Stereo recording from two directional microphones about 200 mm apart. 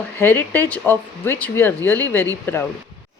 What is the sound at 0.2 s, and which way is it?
Speech, 10° left (ahead or behind).